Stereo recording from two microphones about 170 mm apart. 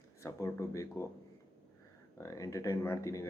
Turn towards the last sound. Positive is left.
turn(degrees=15)  # may be behind; listen again after turning